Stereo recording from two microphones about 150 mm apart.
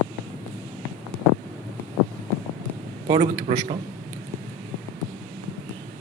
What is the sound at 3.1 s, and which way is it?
Speech, 45° right (ahead or behind).